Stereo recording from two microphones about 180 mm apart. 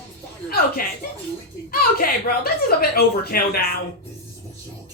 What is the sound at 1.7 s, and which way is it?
A woman's voice, 55° left (ahead or behind).